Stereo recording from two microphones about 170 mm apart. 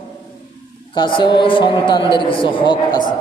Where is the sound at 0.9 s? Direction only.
25° left (ahead or behind).